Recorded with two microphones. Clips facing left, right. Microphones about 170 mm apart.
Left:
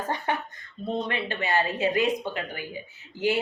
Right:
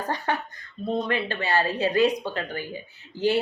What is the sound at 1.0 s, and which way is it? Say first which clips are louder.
Speech: right 2 dB; 20° left (ahead or behind).